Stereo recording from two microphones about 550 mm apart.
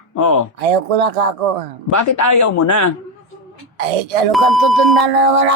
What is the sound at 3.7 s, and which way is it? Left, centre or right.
Speech, right.